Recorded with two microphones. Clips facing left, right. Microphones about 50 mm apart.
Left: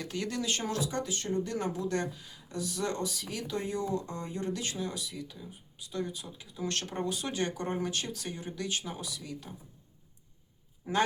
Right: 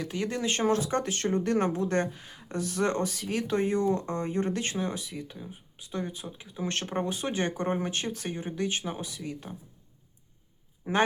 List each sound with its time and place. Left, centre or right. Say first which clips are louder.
0.0 s speech: right 4 dB; centre
0.3 s speech: right 9 dB; right
10.8 s speech: right 3 dB; right